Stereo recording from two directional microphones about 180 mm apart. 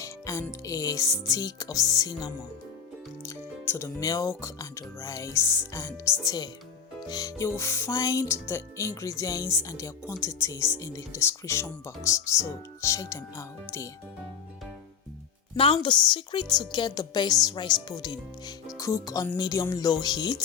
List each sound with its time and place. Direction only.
0.0 s speech: 15° left (ahead or behind)
15.5 s speech: 30° left (ahead or behind)